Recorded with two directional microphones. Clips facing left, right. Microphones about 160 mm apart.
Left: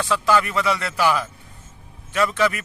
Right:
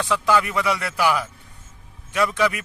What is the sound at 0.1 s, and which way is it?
Speech, 15° right (ahead or behind).